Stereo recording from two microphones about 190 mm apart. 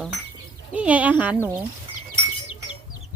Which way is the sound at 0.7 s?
5° right (ahead or behind).